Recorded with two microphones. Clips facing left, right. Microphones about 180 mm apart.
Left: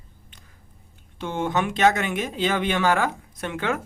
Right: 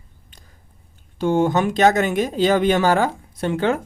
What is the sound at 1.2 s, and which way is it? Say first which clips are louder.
Speech: right 7 dB; 40° right (ahead or behind).